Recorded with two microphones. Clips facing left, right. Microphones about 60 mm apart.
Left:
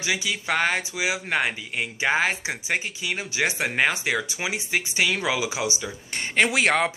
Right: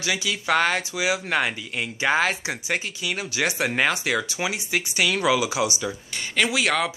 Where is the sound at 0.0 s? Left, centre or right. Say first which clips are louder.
Right 1 dB; left.